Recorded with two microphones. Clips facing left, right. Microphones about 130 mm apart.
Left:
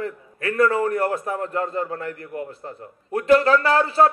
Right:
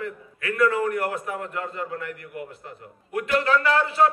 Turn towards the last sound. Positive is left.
turn(degrees=35)  # may be behind; listen again after turning